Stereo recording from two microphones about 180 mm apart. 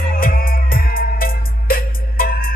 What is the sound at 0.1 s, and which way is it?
Music, 55° left (ahead or behind).